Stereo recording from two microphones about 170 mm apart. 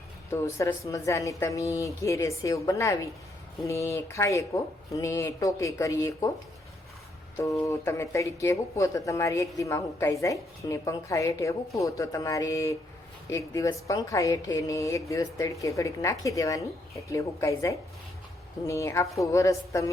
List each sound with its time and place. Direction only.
0.3 s speech: 15° left (ahead or behind)
7.3 s speech: 20° left (ahead or behind)